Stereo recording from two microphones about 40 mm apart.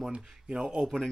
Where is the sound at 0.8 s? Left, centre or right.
Centre.